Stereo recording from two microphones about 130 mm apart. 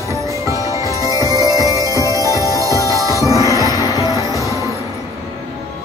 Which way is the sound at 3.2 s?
25° right (ahead or behind).